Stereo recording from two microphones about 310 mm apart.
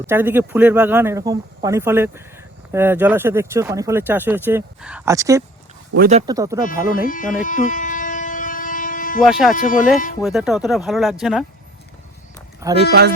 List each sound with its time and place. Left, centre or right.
0.1 s speech: centre
6.0 s speech: right
7.0 s speech: left
7.4 s train: left
9.2 s speech: centre
9.6 s speech: left
10.2 s speech: centre
12.5 s speech: centre
12.9 s speech: right